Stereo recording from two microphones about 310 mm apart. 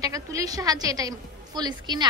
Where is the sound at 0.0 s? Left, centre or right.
Centre.